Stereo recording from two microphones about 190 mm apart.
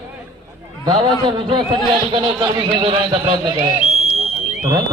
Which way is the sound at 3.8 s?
30° left (ahead or behind).